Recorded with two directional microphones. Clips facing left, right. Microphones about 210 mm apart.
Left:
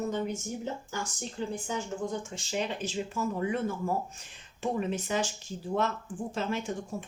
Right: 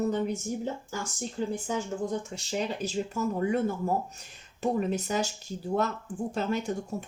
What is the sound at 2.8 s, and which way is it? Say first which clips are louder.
Speech: right 2 dB; 40° right (ahead or behind).